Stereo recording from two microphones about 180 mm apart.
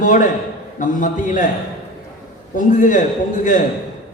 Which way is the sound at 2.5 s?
45° left (ahead or behind).